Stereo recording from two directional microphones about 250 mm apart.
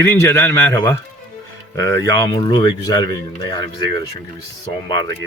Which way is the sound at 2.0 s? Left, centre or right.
Centre.